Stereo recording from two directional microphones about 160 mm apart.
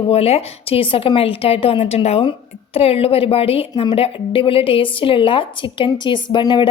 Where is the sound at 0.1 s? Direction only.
40° left (ahead or behind).